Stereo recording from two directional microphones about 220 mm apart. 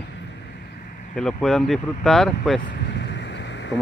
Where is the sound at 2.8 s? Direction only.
50° left (ahead or behind).